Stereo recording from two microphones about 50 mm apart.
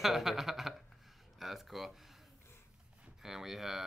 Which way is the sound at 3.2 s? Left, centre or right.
Centre.